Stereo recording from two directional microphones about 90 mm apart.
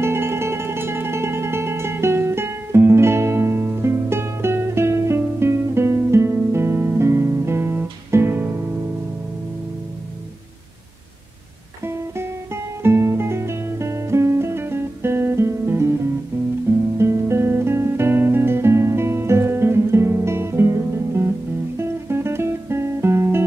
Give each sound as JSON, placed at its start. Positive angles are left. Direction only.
{"t": 0.0, "sound": "music", "side_deg": -30}
{"t": 11.8, "sound": "music", "side_deg": -30}
{"t": 12.8, "sound": "guitar", "side_deg": -25}